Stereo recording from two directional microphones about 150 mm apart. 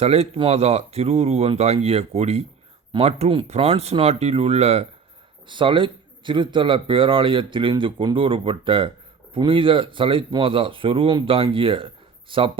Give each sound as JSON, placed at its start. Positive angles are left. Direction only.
{"t": 0.0, "sound": "a man's voice", "side_deg": -45}